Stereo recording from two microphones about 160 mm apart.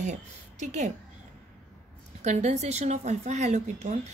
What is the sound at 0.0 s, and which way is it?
Speech, 45° right (ahead or behind).